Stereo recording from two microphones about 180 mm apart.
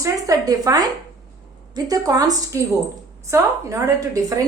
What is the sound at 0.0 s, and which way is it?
A woman's voice, 20° right (ahead or behind).